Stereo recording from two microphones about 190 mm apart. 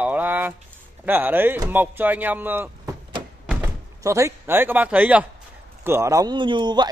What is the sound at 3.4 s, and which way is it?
Door, 5° right (ahead or behind).